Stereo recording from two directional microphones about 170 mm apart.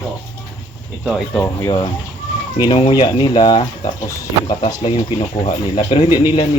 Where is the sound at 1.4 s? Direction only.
20° left (ahead or behind).